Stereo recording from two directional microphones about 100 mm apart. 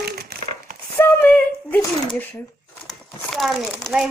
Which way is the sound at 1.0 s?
20° left (ahead or behind).